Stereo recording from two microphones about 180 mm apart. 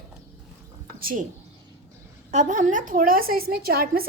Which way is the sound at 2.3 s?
40° right (ahead or behind).